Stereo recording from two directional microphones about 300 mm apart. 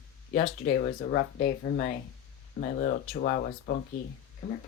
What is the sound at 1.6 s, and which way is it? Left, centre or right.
Speech, left.